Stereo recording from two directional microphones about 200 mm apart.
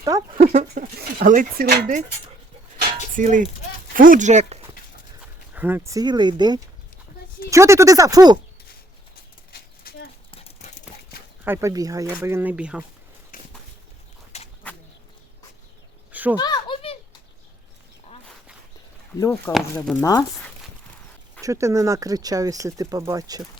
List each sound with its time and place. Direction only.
0.0 s speech: 15° right (ahead or behind)
0.3 s speech: 35° right (ahead or behind)
0.7 s speech: 50° right (ahead or behind)
3.1 s speech: 40° right (ahead or behind)
5.5 s speech: 10° right (ahead or behind)
9.5 s a sound: 50° left (ahead or behind)
10.3 s clip-clop: 30° left (ahead or behind)
11.4 s speech: 15° right (ahead or behind)
13.3 s a sound: 40° left (ahead or behind)
14.3 s bird: 35° left (ahead or behind)
16.1 s a sound: 10° right (ahead or behind)
16.4 s a sound: 25° left (ahead or behind)
19.2 s speech: 10° left (ahead or behind)
21.4 s speech: 15° right (ahead or behind)